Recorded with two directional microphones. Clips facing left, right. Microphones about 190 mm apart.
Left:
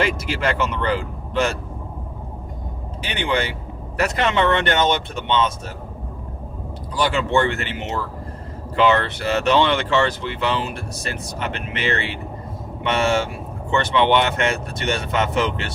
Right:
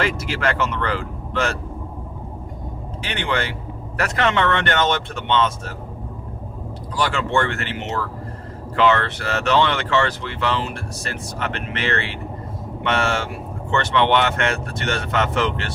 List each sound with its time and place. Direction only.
0.0 s speech: 20° left (ahead or behind)
3.1 s speech: 15° left (ahead or behind)
7.0 s speech: 20° left (ahead or behind)